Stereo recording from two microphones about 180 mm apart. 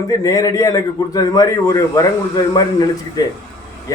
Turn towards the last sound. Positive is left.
turn(degrees=20)  # may be behind; listen again after turning